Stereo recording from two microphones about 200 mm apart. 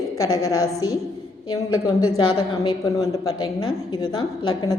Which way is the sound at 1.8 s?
20° left (ahead or behind).